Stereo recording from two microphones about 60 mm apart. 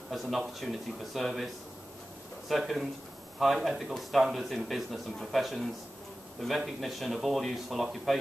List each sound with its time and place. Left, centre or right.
0.1 s a man's voice: centre